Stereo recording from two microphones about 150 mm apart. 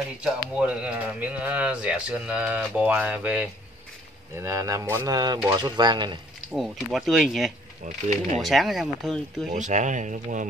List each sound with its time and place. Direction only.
0.2 s speech: 10° right (ahead or behind)
4.4 s speech: 20° right (ahead or behind)
6.5 s speech: centre (ahead or behind)
9.5 s speech: 55° right (ahead or behind)